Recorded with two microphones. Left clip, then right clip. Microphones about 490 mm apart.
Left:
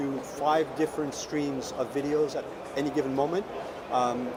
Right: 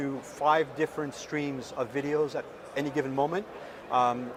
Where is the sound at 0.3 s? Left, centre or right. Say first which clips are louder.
Right 1 dB; right.